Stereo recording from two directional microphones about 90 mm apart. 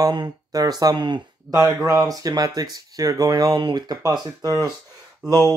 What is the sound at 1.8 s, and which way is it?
Speech, 40° right (ahead or behind).